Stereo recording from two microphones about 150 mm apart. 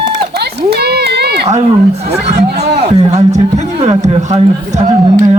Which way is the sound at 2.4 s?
90° right.